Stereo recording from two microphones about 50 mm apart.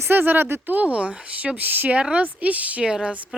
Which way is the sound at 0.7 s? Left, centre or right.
Right.